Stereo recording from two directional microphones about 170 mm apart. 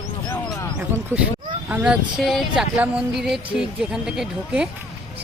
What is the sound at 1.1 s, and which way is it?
A woman's voice, 15° right (ahead or behind).